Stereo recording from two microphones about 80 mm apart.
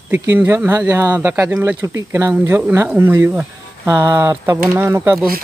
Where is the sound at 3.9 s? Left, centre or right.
Right.